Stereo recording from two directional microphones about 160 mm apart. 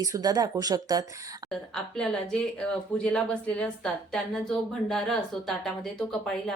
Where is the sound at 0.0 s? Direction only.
20° right (ahead or behind).